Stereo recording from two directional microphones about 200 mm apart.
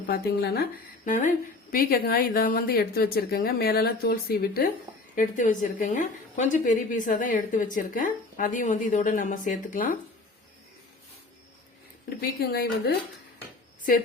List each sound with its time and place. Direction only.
0.1 s a woman's voice: 50° left (ahead or behind)
1.0 s a woman's voice: 40° left (ahead or behind)
12.0 s a woman's voice: 50° left (ahead or behind)